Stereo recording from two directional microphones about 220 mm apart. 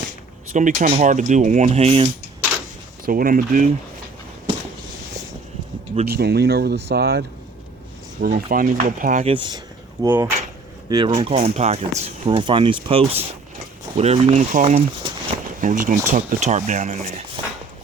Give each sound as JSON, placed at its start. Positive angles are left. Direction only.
{"t": 0.5, "sound": "speech", "side_deg": -35}
{"t": 3.1, "sound": "speech", "side_deg": -40}
{"t": 6.1, "sound": "speech", "side_deg": -45}
{"t": 9.3, "sound": "speech", "side_deg": -25}
{"t": 10.0, "sound": "speech", "side_deg": -10}